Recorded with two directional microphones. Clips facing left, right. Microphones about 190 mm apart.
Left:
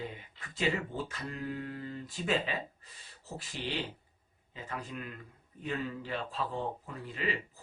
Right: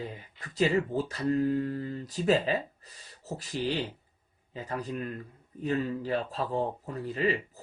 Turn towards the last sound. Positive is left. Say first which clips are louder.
# right 8 dB
turn(degrees=-40)  # may be behind; listen again after turning